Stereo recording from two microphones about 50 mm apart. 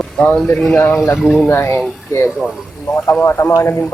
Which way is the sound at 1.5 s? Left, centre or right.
Left.